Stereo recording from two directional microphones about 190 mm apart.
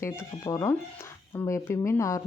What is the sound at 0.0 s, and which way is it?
Speech, 15° left (ahead or behind).